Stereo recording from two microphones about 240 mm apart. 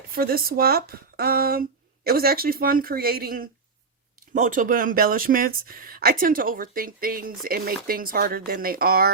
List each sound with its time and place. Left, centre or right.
0.1 s speech: right